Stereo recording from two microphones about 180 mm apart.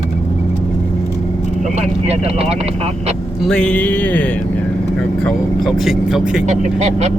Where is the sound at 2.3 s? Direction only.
35° right (ahead or behind).